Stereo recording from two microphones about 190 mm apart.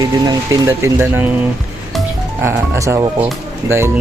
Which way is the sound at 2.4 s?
15° right (ahead or behind).